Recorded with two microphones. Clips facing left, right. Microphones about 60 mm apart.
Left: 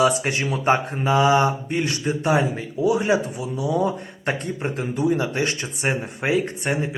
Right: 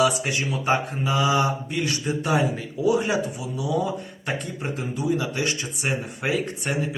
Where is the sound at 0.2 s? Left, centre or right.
Left.